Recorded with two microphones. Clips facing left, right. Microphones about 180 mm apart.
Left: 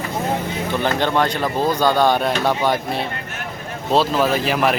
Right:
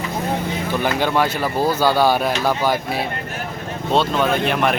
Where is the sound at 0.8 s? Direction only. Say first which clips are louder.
Even; 10° right (ahead or behind).